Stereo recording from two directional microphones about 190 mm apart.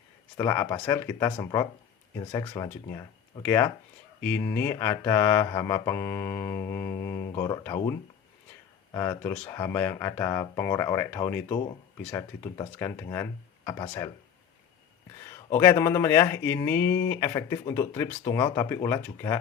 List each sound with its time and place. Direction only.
0.3 s speech: 15° left (ahead or behind)
15.3 s speech: 15° left (ahead or behind)